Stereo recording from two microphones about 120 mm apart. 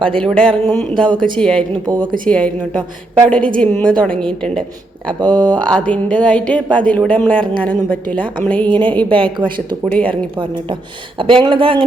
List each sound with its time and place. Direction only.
0.0 s speech: 5° left (ahead or behind)
5.2 s speech: 35° right (ahead or behind)
5.5 s speech: 10° left (ahead or behind)
9.2 s speech: 45° right (ahead or behind)
9.8 s speech: 10° left (ahead or behind)
10.1 s speech: 45° right (ahead or behind)